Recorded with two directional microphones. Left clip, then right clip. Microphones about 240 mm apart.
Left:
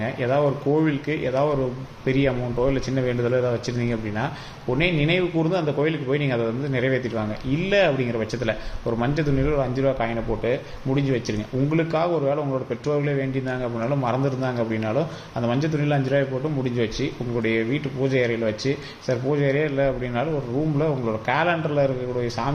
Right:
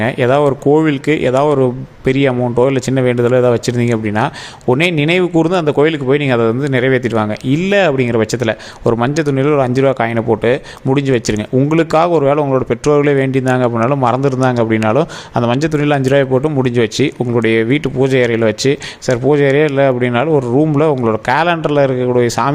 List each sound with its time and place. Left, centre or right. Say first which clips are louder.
0.0 s a man's voice: right 10 dB; right